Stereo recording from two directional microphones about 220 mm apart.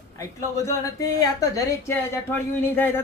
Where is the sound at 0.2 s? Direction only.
15° left (ahead or behind).